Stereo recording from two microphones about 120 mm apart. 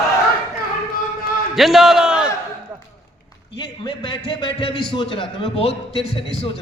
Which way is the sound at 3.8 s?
40° left (ahead or behind).